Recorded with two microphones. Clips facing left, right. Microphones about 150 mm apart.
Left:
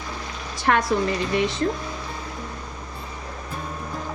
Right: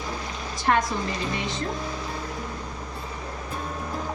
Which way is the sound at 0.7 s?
70° left (ahead or behind).